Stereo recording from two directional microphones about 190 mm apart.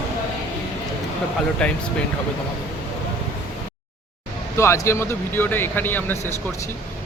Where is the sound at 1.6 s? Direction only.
5° left (ahead or behind).